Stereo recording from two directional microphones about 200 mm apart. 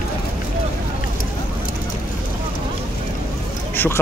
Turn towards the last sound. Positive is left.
turn(degrees=10)  # may be behind; listen again after turning